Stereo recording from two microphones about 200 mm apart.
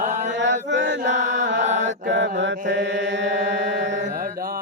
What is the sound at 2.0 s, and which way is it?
Chant, 60° right (ahead or behind).